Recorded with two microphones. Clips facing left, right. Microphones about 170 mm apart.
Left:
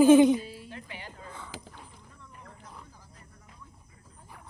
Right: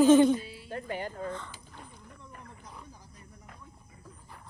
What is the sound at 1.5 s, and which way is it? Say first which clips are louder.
Rowboat: left 10 dB; 90° left.